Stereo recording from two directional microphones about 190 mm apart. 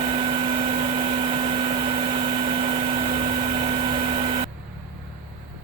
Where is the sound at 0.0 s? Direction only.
30° right (ahead or behind).